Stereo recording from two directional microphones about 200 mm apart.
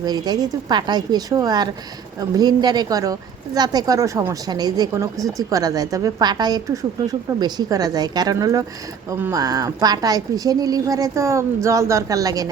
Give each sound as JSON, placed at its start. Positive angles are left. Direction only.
{"t": 0.0, "sound": "a woman's voice", "side_deg": -20}